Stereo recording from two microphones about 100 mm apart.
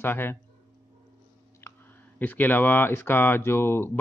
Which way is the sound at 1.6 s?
25° left (ahead or behind).